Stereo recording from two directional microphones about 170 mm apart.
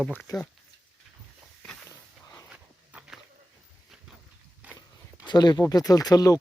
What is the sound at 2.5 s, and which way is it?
Dog, 5° right (ahead or behind).